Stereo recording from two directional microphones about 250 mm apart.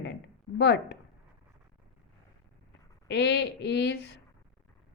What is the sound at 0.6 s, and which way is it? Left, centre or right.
Speech, left.